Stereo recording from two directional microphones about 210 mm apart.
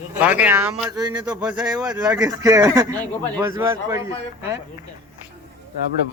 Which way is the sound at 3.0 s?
5° left (ahead or behind).